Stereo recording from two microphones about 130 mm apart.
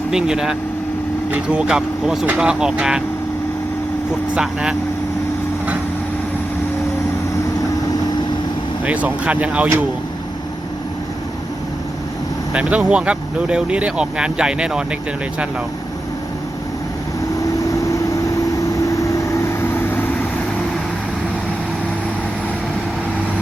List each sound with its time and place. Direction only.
0.1 s speech: 5° right (ahead or behind)
4.4 s speech: 5° right (ahead or behind)
8.8 s speech: 10° right (ahead or behind)
12.5 s speech: 10° right (ahead or behind)
17.4 s vehicle: 25° left (ahead or behind)